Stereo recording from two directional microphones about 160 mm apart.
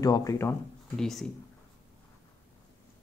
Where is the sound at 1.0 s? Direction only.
Centre (ahead or behind).